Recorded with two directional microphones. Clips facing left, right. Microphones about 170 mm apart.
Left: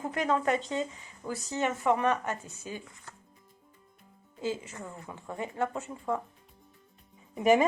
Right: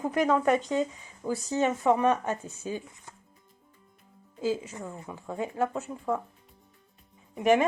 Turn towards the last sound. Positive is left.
turn(degrees=5)  # may be behind; listen again after turning